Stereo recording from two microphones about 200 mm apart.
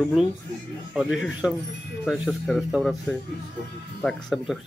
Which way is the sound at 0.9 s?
Centre (ahead or behind).